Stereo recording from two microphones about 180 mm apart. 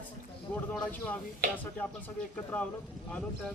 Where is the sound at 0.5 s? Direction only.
5° left (ahead or behind).